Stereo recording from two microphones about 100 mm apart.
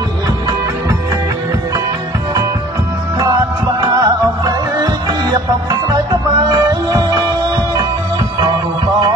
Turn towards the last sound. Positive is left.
turn(degrees=-40)  # may be behind; listen again after turning